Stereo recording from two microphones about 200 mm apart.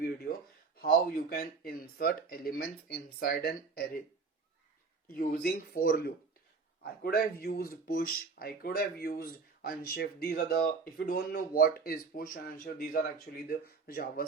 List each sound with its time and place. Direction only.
0.8 s speech: 50° left (ahead or behind)
5.0 s speech: 45° left (ahead or behind)